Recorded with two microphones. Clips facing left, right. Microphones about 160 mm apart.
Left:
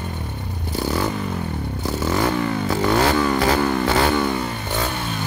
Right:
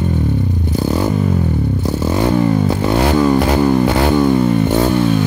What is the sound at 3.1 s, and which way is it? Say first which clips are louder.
Music: right 6 dB; 20° right (ahead or behind).